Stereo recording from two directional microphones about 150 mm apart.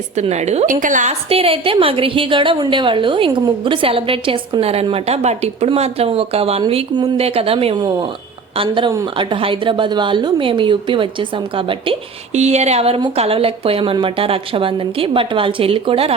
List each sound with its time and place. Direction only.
0.2 s a woman's voice: 45° right (ahead or behind)
1.3 s a woman's voice: 40° right (ahead or behind)
7.8 s a woman's voice: 25° right (ahead or behind)
12.3 s a woman's voice: 50° right (ahead or behind)